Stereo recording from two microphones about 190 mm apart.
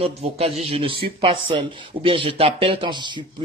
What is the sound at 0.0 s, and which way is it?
Speech, 35° right (ahead or behind).